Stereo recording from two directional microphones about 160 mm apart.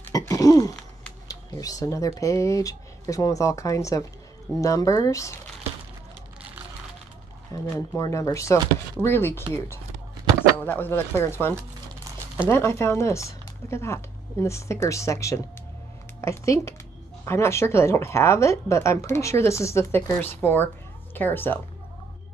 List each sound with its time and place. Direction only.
0.1 s throat clearing: 20° left (ahead or behind)
1.3 s speech: 20° left (ahead or behind)
7.5 s a woman's voice: 15° left (ahead or behind)
10.6 s a woman's voice: 10° left (ahead or behind)